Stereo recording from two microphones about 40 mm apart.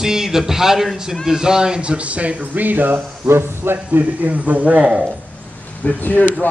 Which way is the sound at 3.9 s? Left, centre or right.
Right.